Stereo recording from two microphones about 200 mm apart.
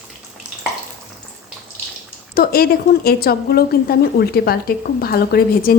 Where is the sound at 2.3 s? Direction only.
50° left (ahead or behind).